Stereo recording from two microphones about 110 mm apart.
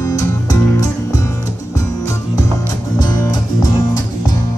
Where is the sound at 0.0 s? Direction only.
35° left (ahead or behind).